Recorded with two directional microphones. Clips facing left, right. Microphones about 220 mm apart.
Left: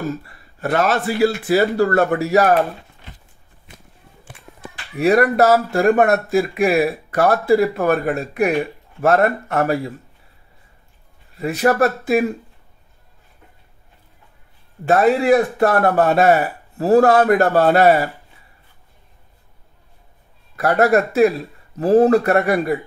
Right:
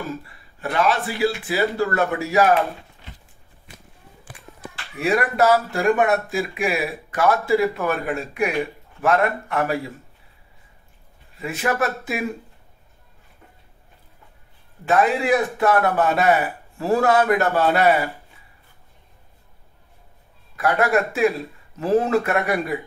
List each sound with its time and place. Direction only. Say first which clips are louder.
0.1 s speech: left 3 dB; 45° left (ahead or behind)
4.9 s a man's voice: left 6 dB; 40° left (ahead or behind)
11.3 s a man's voice: left 7 dB; 40° left (ahead or behind)
14.9 s a man's voice: left 5 dB; 40° left (ahead or behind)
20.5 s a man's voice: left 4 dB; 40° left (ahead or behind)